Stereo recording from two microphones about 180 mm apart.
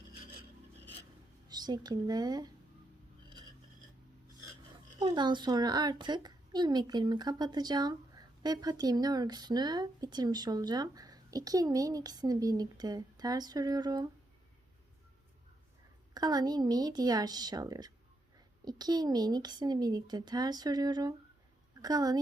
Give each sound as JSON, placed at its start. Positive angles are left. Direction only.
{"t": 1.5, "sound": "speech", "side_deg": -20}
{"t": 4.9, "sound": "a woman's voice", "side_deg": -25}
{"t": 16.1, "sound": "a woman's voice", "side_deg": -20}